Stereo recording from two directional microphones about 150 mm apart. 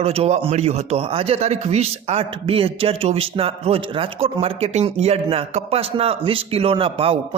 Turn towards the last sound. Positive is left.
turn(degrees=-40)  # may be behind; listen again after turning